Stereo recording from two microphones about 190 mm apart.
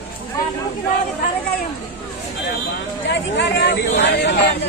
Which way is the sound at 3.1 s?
65° left (ahead or behind).